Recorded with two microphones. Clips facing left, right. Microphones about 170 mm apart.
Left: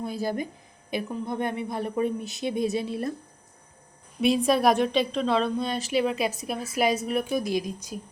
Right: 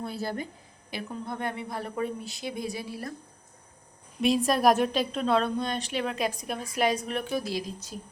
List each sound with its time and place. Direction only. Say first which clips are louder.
0.0 s a woman's voice: left 4 dB; 15° left (ahead or behind)
4.2 s a woman's voice: left 2 dB; centre (ahead or behind)